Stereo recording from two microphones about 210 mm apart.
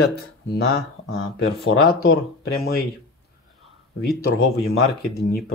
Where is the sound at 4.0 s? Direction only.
45° left (ahead or behind).